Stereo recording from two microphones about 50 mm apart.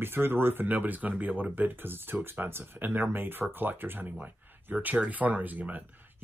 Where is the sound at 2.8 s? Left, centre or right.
Right.